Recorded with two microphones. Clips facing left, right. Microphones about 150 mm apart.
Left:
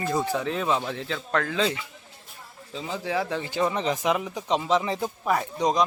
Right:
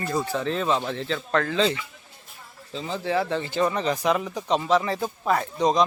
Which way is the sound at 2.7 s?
10° left (ahead or behind).